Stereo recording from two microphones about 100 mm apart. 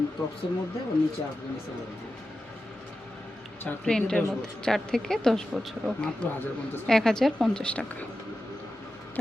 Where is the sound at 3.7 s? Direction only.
5° left (ahead or behind).